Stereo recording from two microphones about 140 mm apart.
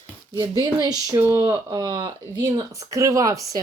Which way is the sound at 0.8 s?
20° right (ahead or behind).